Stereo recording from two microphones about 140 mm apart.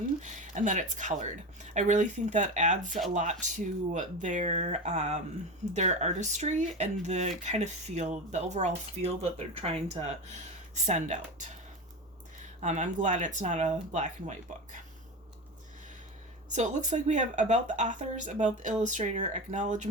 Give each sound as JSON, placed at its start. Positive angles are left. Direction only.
{"t": 0.2, "sound": "speech", "side_deg": -60}
{"t": 12.5, "sound": "speech", "side_deg": -60}
{"t": 16.5, "sound": "speech", "side_deg": -60}